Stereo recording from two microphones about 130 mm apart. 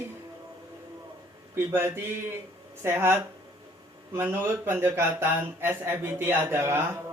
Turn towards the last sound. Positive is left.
turn(degrees=-20)  # may be behind; listen again after turning